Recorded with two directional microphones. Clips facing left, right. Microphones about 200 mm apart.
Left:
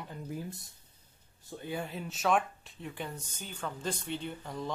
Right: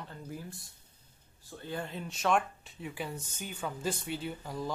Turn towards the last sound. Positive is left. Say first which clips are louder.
# right 1 dB
turn(degrees=-5)  # may be behind; listen again after turning